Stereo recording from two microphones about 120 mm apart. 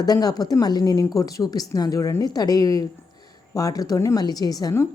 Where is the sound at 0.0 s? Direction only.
35° left (ahead or behind).